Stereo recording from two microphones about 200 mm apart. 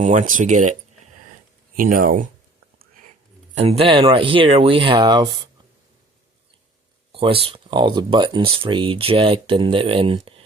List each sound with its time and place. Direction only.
0.0 s speech: 35° right (ahead or behind)
2.7 s whispering: 40° right (ahead or behind)
3.5 s speech: 30° right (ahead or behind)
7.1 s speech: 25° right (ahead or behind)